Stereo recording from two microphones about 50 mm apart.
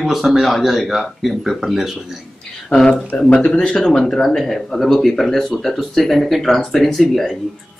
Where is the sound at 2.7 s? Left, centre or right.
Left.